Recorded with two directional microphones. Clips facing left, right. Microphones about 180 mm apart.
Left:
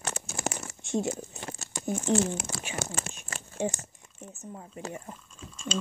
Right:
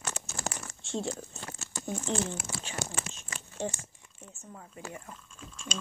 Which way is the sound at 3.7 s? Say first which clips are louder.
Left 4 dB; 45° left (ahead or behind).